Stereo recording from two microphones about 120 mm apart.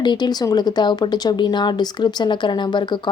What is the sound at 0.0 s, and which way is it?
Speech, 35° left (ahead or behind).